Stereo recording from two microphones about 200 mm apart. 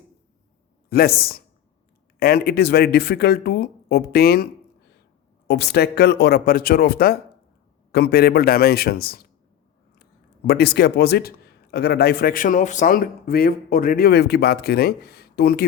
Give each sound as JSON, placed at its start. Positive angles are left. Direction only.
{"t": 0.9, "sound": "a man's voice", "side_deg": 50}
{"t": 5.5, "sound": "a man's voice", "side_deg": 55}